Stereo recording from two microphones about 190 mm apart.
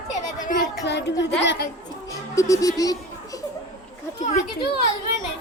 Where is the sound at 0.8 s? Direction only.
65° left (ahead or behind).